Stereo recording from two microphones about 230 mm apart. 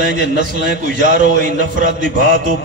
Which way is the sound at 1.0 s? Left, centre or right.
Right.